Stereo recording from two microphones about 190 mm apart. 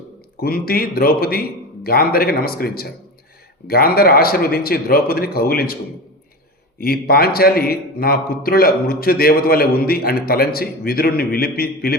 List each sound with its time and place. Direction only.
0.4 s a man's voice: 50° left (ahead or behind)
6.7 s a man's voice: 50° left (ahead or behind)